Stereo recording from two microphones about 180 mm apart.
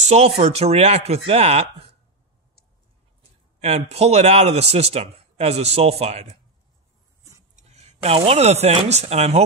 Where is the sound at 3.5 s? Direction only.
35° right (ahead or behind).